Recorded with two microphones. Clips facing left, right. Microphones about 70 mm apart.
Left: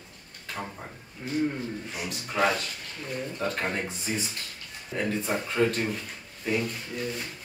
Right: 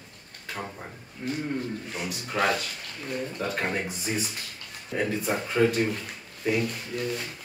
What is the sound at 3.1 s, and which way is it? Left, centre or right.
Speech, centre.